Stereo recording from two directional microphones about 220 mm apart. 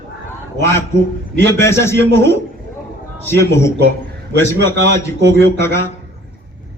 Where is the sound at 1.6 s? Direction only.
10° left (ahead or behind).